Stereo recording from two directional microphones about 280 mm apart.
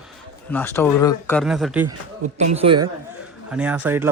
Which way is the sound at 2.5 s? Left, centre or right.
Centre.